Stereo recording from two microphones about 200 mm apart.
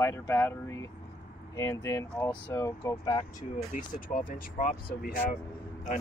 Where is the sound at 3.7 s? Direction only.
45° left (ahead or behind).